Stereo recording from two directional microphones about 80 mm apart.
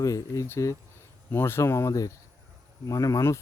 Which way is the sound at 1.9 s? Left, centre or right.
Left.